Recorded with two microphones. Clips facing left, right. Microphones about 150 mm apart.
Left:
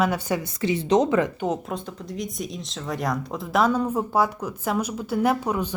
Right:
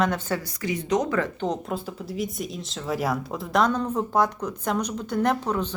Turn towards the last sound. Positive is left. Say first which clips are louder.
# left 1 dB
turn(degrees=10)  # may be behind; listen again after turning